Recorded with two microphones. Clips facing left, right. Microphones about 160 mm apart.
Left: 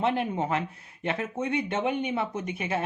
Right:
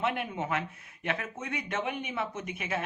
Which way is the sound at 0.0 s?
30° left (ahead or behind).